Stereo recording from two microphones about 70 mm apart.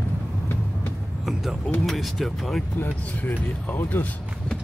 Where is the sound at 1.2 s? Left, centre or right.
Centre.